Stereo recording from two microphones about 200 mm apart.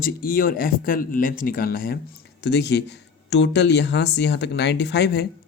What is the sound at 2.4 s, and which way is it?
Speech, 60° left (ahead or behind).